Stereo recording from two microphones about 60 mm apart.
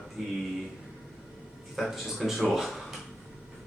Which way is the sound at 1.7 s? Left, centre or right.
Centre.